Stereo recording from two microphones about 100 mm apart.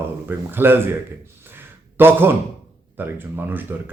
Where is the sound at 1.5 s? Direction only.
20° right (ahead or behind).